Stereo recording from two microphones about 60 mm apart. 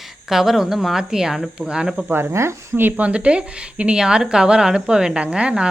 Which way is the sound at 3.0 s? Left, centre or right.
Centre.